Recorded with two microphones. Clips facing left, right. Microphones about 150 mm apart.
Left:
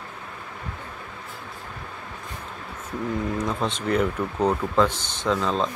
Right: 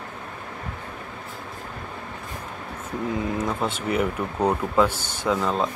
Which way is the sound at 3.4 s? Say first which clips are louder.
Even; 5° right (ahead or behind).